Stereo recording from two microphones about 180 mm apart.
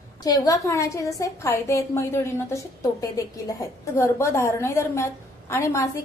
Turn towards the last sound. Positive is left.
turn(degrees=15)  # may be behind; listen again after turning